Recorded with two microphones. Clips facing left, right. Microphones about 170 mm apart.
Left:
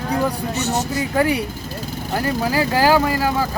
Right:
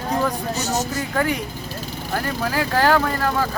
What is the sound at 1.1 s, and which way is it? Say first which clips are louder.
Speech: left 4 dB; 10° left (ahead or behind).